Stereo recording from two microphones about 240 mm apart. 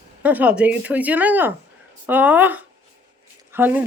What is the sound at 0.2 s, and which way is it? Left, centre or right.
Speech, centre.